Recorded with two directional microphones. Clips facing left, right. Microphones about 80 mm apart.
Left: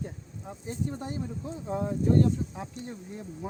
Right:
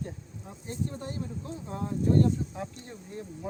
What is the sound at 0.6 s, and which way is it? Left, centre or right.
Speech, centre.